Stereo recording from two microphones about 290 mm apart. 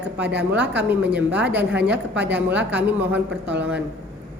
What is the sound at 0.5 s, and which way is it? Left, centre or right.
A woman's voice, centre.